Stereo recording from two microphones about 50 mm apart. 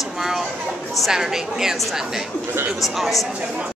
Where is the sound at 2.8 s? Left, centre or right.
Centre.